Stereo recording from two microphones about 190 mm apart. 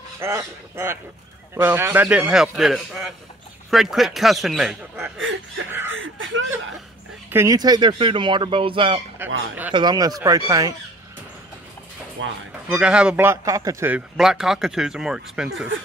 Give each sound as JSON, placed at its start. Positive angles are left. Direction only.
{"t": 0.2, "sound": "a man's voice", "side_deg": -15}
{"t": 5.9, "sound": "speech", "side_deg": -90}
{"t": 7.2, "sound": "speech", "side_deg": -15}
{"t": 12.2, "sound": "speech", "side_deg": -80}
{"t": 12.6, "sound": "a man's voice", "side_deg": -5}